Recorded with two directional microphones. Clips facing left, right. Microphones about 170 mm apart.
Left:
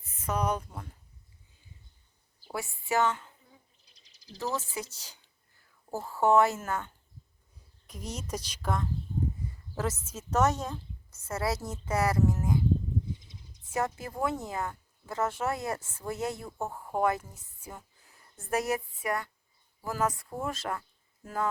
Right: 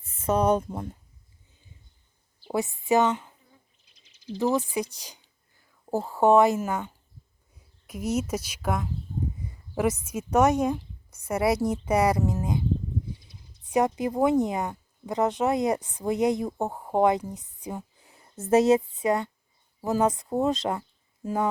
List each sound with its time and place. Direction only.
0.0 s speech: 30° right (ahead or behind)
2.5 s speech: 20° right (ahead or behind)
3.8 s bird: 35° left (ahead or behind)
4.5 s a woman's voice: 15° right (ahead or behind)
13.7 s a woman's voice: 15° right (ahead or behind)